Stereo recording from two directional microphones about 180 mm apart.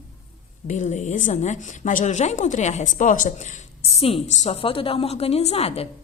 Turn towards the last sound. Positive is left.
turn(degrees=35)  # may be behind; listen again after turning